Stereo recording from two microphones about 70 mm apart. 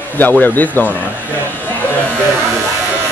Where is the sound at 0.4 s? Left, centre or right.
Left.